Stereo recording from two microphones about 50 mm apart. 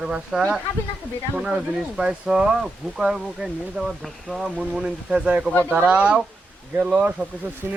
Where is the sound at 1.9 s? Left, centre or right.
Centre.